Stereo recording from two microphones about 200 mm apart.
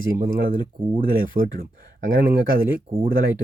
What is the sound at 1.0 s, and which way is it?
Speech, 45° right (ahead or behind).